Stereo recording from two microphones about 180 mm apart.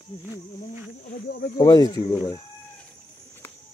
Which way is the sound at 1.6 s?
20° left (ahead or behind).